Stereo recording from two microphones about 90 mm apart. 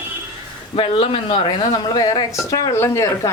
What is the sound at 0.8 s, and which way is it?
Speech, 80° left.